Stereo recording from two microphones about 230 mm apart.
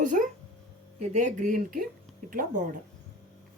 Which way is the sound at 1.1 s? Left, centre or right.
Right.